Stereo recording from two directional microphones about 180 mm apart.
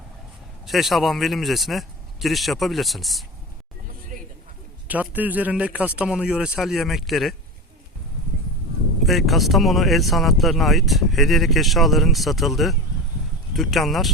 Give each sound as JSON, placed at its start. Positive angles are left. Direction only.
{"t": 0.6, "sound": "speech", "side_deg": 0}
{"t": 4.1, "sound": "a sound", "side_deg": -55}
{"t": 4.9, "sound": "speech", "side_deg": -10}
{"t": 9.0, "sound": "speech", "side_deg": 0}